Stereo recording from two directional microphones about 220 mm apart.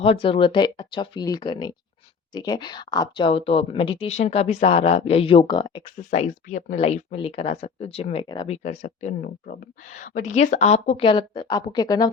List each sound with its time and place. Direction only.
0.0 s speech: 25° left (ahead or behind)
6.1 s speech: 30° left (ahead or behind)